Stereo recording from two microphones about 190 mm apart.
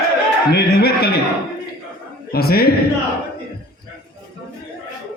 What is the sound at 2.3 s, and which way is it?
Speech, 55° left (ahead or behind).